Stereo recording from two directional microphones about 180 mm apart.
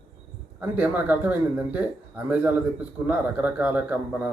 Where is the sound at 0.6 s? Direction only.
10° right (ahead or behind).